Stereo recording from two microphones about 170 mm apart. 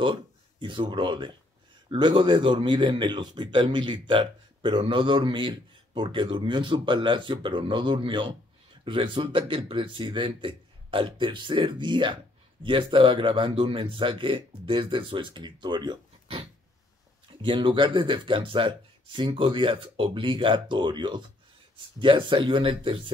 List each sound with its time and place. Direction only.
0.0 s speech: 30° right (ahead or behind)